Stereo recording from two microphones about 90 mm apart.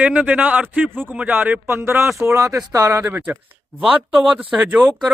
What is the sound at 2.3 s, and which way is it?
Speech, 40° right (ahead or behind).